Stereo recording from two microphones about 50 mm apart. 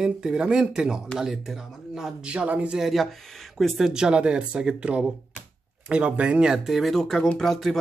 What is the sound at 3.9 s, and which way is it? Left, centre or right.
Speech, centre.